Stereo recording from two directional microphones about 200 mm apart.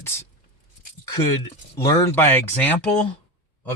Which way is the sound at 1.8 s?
15° left (ahead or behind).